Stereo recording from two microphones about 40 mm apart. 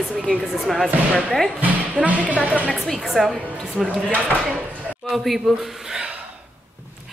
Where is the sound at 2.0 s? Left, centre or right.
Right.